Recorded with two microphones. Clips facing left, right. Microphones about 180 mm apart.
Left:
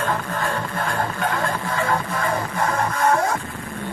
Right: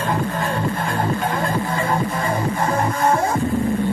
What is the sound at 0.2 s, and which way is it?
Music, 25° right (ahead or behind).